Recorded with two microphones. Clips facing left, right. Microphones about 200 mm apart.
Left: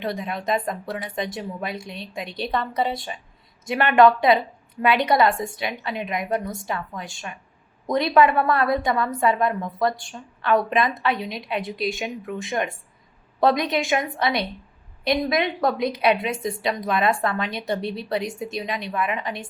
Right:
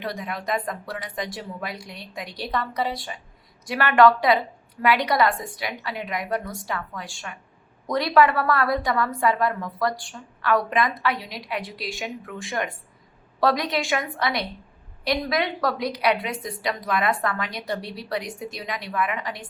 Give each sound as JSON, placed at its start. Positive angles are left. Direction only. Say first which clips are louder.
{"t": 0.0, "sound": "a woman's voice", "louder": "left 3 dB", "side_deg": 25}